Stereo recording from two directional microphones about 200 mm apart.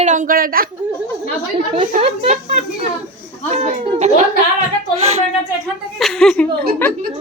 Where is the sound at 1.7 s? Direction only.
30° right (ahead or behind).